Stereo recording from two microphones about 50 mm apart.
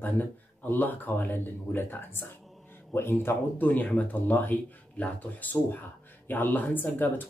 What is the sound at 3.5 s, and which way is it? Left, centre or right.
Speech, left.